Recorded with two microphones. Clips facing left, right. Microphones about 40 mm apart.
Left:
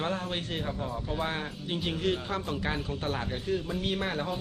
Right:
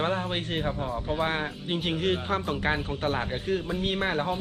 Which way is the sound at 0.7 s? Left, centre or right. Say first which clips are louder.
Right 4 dB; centre.